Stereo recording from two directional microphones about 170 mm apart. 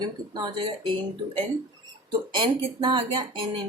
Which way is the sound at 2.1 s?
25° right (ahead or behind).